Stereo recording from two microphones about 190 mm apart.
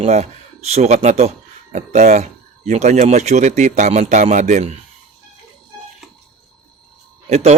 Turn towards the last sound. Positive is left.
turn(degrees=-35)  # may be behind; listen again after turning